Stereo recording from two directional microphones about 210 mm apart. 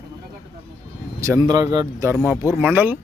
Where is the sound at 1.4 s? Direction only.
20° right (ahead or behind).